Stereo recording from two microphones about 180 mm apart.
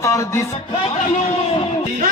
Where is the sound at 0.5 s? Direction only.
30° left (ahead or behind).